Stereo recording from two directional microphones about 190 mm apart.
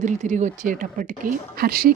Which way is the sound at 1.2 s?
50° right (ahead or behind).